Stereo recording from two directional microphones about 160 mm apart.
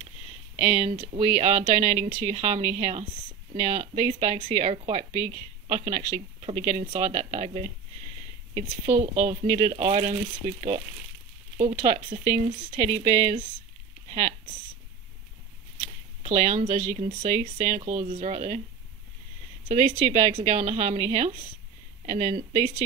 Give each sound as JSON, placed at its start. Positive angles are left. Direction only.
{"t": 0.6, "sound": "speech", "side_deg": -35}
{"t": 11.5, "sound": "speech", "side_deg": -40}
{"t": 12.8, "sound": "speech", "side_deg": 25}
{"t": 15.8, "sound": "speech", "side_deg": -45}
{"t": 19.7, "sound": "speech", "side_deg": -40}